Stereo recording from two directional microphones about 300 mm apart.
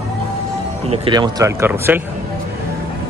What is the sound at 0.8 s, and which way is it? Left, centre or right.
Speech, centre.